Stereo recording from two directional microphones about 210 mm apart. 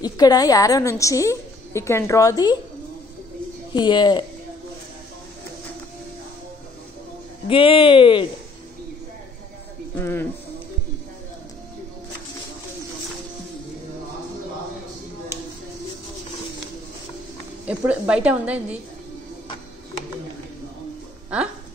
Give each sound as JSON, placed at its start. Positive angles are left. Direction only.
{"t": 0.0, "sound": "a woman's voice", "side_deg": 20}
{"t": 3.7, "sound": "speech", "side_deg": 20}
{"t": 7.4, "sound": "speech", "side_deg": 25}
{"t": 9.9, "sound": "a woman's voice", "side_deg": 10}
{"t": 17.6, "sound": "a woman's voice", "side_deg": -5}